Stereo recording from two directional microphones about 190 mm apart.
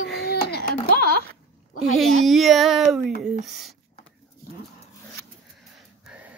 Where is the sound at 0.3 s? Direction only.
55° left (ahead or behind).